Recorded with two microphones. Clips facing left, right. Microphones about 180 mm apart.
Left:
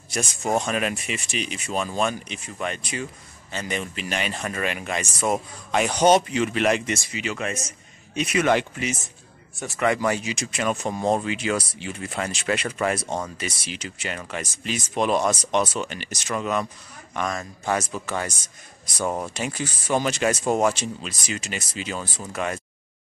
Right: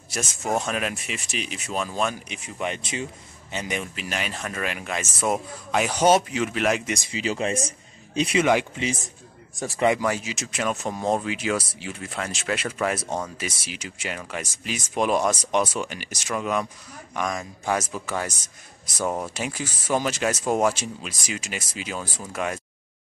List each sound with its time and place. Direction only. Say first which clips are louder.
0.1 s speech: left 2 dB; 5° right (ahead or behind); by 3.1 s 25° right (ahead or behind)
3.5 s speech: left 1 dB; 10° right (ahead or behind)
7.1 s speech: right 3 dB; 30° right (ahead or behind)
9.6 s speech: right 3 dB; 35° right (ahead or behind)
10.0 s speech: left 2 dB; centre (ahead or behind)